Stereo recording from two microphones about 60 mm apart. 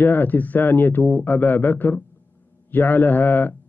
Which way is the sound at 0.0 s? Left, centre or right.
Left.